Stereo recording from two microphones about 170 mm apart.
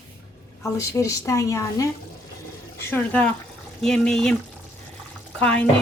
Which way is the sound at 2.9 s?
10° left (ahead or behind).